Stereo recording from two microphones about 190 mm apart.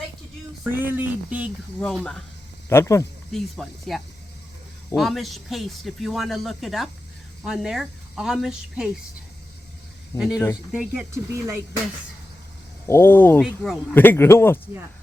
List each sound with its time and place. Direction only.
0.8 s speech: 10° right (ahead or behind)
1.8 s speech: 5° left (ahead or behind)
2.6 s speech: 15° left (ahead or behind)
3.3 s speech: centre (ahead or behind)
10.2 s speech: 5° right (ahead or behind)
12.9 s speech: 10° left (ahead or behind)
13.4 s speech: centre (ahead or behind)
13.9 s speech: 10° left (ahead or behind)